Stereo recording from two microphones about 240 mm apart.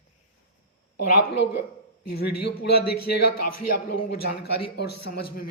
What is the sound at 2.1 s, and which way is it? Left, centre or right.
Speech, left.